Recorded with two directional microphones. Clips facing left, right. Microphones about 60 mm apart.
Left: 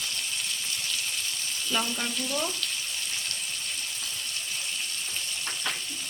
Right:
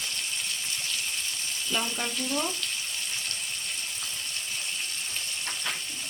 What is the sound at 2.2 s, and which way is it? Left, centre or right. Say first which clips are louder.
Frying: right 3 dB; centre.